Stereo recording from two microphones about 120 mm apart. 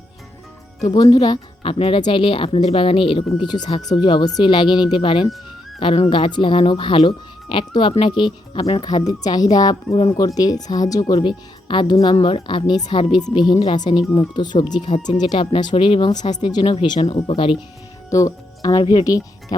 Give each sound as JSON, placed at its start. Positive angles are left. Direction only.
{"t": 0.9, "sound": "speech", "side_deg": 35}
{"t": 11.2, "sound": "a woman's voice", "side_deg": 40}
{"t": 18.1, "sound": "speech", "side_deg": 25}